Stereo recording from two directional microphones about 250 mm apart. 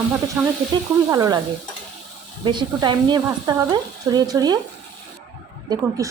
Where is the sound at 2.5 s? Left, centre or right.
Centre.